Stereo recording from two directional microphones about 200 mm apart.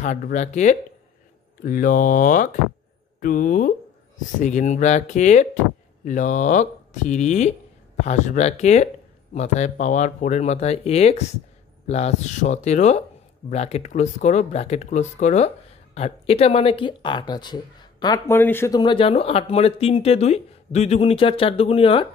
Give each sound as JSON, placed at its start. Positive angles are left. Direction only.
{"t": 0.0, "sound": "speech", "side_deg": 40}